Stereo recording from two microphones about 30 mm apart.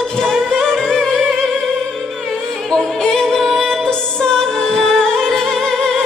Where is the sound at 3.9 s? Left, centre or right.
Left.